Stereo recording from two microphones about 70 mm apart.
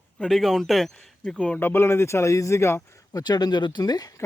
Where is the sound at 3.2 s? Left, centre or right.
Left.